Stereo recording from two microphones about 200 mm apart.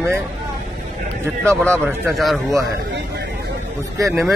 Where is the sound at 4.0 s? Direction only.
15° right (ahead or behind).